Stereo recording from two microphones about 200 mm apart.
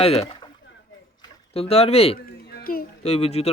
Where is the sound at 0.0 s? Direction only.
30° left (ahead or behind).